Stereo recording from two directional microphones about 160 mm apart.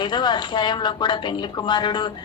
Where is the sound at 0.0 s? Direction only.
30° left (ahead or behind).